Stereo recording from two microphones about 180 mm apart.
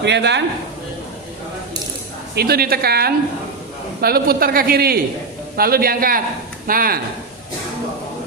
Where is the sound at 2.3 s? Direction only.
60° right (ahead or behind).